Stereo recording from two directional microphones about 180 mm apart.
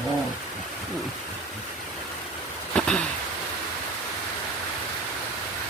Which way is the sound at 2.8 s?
5° left (ahead or behind).